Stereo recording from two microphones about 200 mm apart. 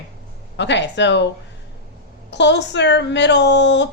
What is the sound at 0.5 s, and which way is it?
Speech, 60° left (ahead or behind).